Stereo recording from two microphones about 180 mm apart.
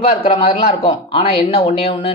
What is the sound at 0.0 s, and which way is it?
Speech, 30° left (ahead or behind).